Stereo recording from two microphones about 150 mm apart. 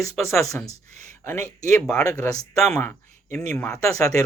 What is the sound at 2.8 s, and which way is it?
Speech, 15° left (ahead or behind).